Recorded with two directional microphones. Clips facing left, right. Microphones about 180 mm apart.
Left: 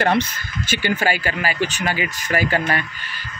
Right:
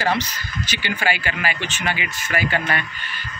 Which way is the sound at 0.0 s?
55° left (ahead or behind).